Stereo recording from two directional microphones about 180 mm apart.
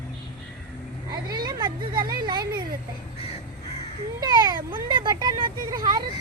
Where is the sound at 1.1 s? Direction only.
25° right (ahead or behind).